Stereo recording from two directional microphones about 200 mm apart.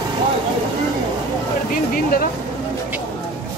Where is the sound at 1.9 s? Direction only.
45° left (ahead or behind).